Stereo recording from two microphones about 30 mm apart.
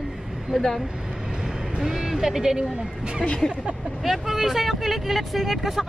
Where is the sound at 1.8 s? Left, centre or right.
Centre.